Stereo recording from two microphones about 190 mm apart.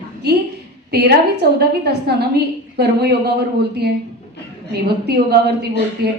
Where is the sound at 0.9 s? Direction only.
60° right (ahead or behind).